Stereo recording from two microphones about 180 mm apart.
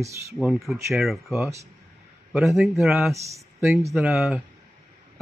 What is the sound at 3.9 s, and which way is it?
Speech, 5° right (ahead or behind).